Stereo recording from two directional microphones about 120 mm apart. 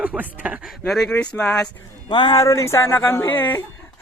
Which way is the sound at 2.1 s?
40° left (ahead or behind).